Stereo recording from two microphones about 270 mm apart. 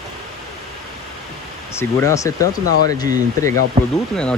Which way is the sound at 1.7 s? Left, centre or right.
Centre.